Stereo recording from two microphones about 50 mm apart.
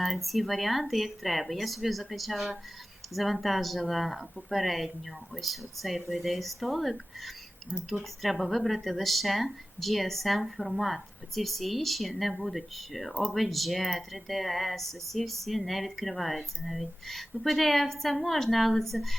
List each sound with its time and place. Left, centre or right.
0.0 s speech: centre